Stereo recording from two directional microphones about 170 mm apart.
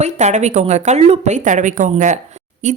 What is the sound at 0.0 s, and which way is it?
A woman's voice, 40° right (ahead or behind).